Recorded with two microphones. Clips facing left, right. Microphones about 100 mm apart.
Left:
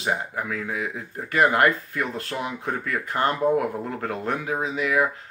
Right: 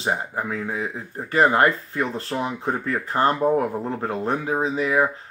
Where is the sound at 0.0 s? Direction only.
30° right (ahead or behind).